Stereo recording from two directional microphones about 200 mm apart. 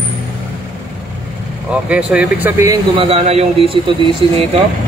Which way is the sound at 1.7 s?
5° right (ahead or behind).